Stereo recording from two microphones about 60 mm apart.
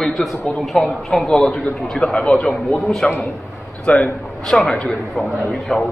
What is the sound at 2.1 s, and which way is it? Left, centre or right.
Speech, centre.